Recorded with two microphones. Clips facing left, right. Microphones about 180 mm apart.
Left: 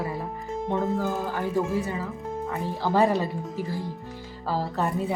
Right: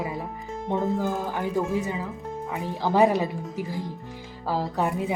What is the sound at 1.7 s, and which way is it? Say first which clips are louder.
Speech: even; 15° right (ahead or behind).